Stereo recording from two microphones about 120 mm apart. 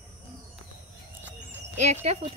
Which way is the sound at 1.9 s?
65° right (ahead or behind).